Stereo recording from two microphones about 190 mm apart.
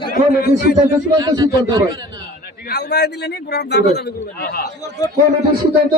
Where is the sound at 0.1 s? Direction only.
50° left (ahead or behind).